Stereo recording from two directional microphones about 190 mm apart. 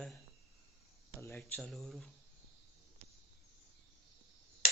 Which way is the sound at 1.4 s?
5° left (ahead or behind).